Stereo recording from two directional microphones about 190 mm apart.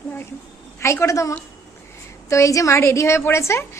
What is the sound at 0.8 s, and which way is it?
A woman's voice, 15° left (ahead or behind).